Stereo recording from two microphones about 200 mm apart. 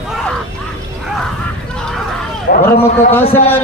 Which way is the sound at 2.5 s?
50° left (ahead or behind).